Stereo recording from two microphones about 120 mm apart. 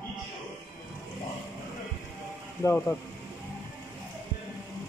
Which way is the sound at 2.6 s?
20° left (ahead or behind).